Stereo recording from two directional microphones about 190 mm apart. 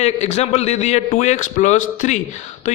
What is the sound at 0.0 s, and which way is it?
A man's voice, 35° left (ahead or behind).